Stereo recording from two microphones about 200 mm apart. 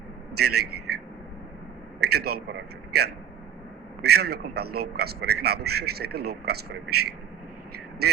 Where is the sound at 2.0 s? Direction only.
50° right (ahead or behind).